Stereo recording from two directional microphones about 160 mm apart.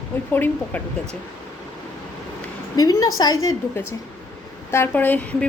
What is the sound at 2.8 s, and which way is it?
A woman's voice, 25° left (ahead or behind).